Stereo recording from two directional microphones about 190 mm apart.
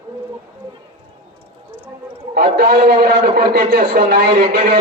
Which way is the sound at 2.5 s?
55° right (ahead or behind).